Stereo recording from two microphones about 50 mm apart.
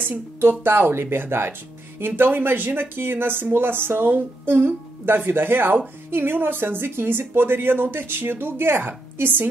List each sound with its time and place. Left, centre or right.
0.4 s speech: right